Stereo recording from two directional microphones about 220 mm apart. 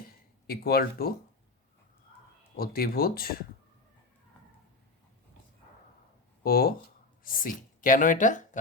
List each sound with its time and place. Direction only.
0.0 s a sound: 45° left (ahead or behind)
2.6 s speech: 40° left (ahead or behind)
6.4 s speech: 40° left (ahead or behind)